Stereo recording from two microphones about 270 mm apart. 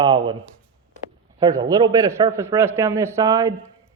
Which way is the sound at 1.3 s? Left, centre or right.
Centre.